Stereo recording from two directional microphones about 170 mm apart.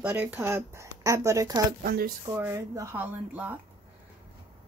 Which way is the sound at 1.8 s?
60° right (ahead or behind).